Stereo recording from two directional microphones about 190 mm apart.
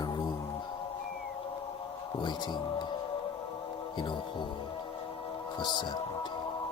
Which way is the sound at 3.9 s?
25° left (ahead or behind).